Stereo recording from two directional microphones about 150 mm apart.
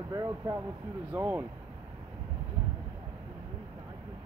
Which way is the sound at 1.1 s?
10° right (ahead or behind).